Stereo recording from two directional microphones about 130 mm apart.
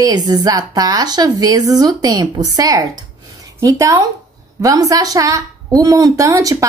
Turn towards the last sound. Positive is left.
turn(degrees=-25)  # may be behind; listen again after turning